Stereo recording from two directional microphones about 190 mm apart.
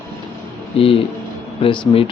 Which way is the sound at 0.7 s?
30° left (ahead or behind).